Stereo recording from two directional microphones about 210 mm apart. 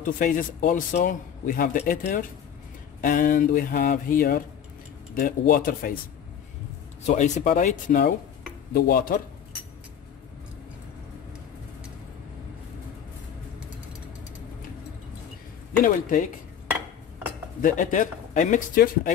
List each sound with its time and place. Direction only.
0.0 s speech: 40° left (ahead or behind)
7.1 s speech: 35° left (ahead or behind)
15.8 s speech: 40° left (ahead or behind)
17.6 s speech: 40° left (ahead or behind)